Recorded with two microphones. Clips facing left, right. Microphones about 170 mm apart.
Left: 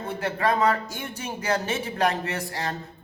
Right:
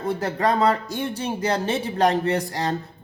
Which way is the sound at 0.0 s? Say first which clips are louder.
Right 3 dB; 35° right (ahead or behind).